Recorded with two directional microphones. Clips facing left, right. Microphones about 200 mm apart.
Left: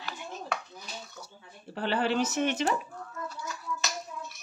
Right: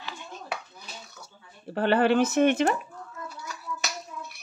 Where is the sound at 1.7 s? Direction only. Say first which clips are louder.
Right 7 dB; 55° right (ahead or behind).